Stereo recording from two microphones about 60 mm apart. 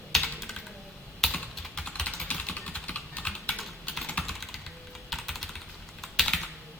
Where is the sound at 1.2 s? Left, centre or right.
Centre.